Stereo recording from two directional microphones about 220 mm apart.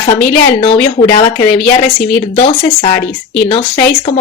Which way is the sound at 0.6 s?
25° left (ahead or behind).